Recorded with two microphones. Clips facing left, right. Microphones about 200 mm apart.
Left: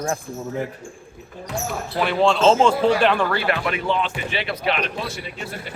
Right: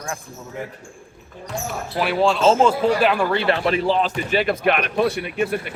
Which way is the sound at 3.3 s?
25° right (ahead or behind).